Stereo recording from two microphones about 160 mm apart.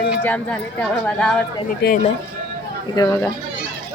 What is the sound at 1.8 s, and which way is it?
Speech, 90° left.